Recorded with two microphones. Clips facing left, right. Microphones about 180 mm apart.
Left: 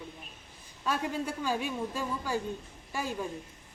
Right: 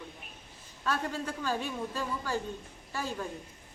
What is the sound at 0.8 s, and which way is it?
A woman's voice, 15° left (ahead or behind).